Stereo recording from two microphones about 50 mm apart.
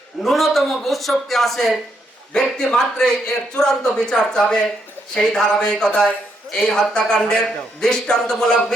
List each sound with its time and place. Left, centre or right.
0.2 s a man's voice: centre